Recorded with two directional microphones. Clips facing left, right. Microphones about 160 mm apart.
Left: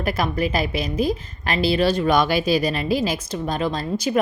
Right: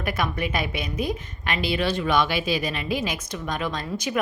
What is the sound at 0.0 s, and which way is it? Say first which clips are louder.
A woman's voice: left 4 dB; 35° left (ahead or behind).